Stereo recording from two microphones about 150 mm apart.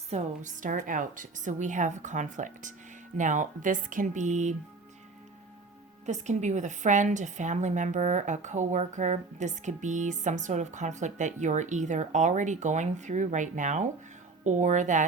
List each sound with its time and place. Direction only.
0.1 s a woman's voice: 55° right (ahead or behind)
6.1 s a woman's voice: 50° right (ahead or behind)